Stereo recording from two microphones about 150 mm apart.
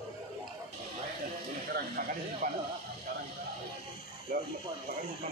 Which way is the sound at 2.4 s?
65° right (ahead or behind).